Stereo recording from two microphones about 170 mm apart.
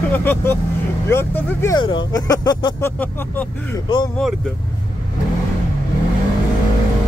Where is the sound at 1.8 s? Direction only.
25° left (ahead or behind).